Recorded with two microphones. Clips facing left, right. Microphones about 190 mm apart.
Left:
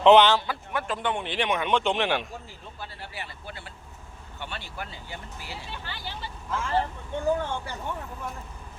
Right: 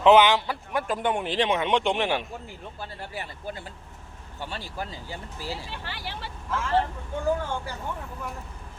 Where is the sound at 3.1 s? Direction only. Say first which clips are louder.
Right 6 dB; 45° right (ahead or behind).